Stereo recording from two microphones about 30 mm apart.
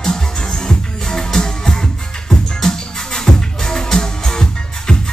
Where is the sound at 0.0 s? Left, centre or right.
Left.